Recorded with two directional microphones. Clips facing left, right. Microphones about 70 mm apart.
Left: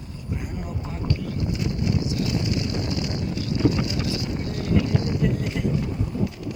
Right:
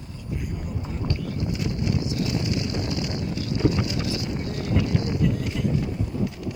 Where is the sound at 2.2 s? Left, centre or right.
Centre.